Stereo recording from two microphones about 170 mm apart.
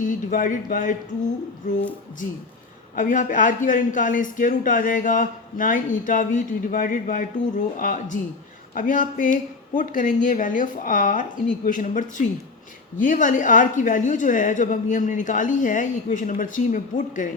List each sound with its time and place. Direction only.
0.0 s speech: 50° left (ahead or behind)
2.9 s speech: 50° left (ahead or behind)